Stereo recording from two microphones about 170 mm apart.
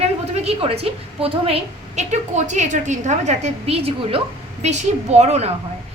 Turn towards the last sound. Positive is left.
turn(degrees=-40)  # may be behind; listen again after turning